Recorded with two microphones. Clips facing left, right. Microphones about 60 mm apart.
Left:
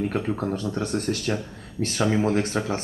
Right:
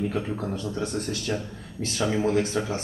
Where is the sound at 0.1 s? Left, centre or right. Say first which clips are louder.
Left 3 dB; left.